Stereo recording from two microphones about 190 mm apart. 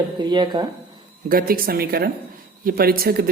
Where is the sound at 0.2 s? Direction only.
25° right (ahead or behind).